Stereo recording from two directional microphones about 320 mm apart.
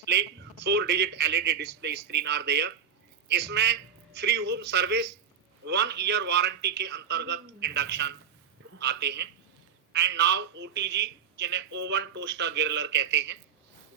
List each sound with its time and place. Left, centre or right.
0.0 s a man's voice: right